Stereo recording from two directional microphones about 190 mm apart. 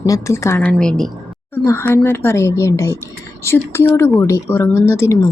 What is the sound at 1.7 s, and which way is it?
Speech, 15° left (ahead or behind).